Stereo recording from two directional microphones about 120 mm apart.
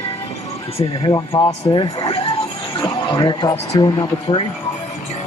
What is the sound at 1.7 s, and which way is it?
Speech, 40° left (ahead or behind).